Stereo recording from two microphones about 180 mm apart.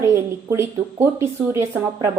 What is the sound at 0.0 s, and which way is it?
A woman's voice, 15° right (ahead or behind).